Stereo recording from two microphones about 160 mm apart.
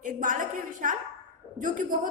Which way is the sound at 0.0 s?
55° right (ahead or behind).